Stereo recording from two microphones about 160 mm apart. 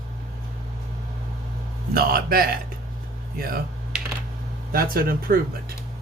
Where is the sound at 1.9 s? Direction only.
65° right (ahead or behind).